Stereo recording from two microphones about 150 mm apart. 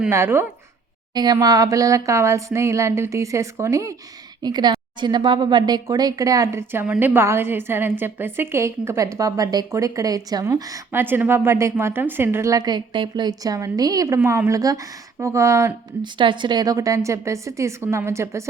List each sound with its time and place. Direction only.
0.1 s speech: 15° right (ahead or behind)
1.1 s a woman's voice: 30° right (ahead or behind)
16.1 s a woman's voice: 30° right (ahead or behind)